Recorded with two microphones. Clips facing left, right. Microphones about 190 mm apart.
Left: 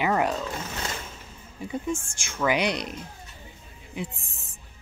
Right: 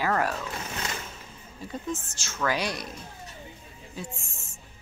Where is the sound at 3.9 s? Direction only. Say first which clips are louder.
Left 4 dB; 15° left (ahead or behind).